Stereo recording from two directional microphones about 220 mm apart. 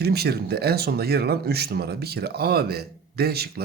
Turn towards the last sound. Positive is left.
turn(degrees=-45)  # may be behind; listen again after turning